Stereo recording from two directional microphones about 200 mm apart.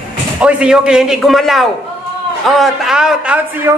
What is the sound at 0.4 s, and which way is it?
Speech, 5° right (ahead or behind).